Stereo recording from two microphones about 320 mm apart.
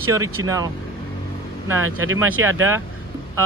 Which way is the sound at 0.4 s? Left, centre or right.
Right.